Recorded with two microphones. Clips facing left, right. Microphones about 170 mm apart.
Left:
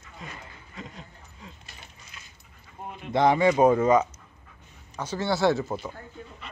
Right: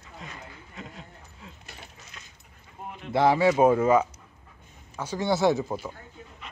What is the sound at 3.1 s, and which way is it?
Speech, 5° right (ahead or behind).